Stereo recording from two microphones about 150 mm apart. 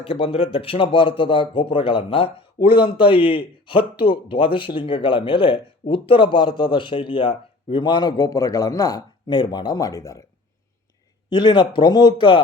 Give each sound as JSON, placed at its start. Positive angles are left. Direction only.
{"t": 0.0, "sound": "speech", "side_deg": 40}
{"t": 11.3, "sound": "speech", "side_deg": 30}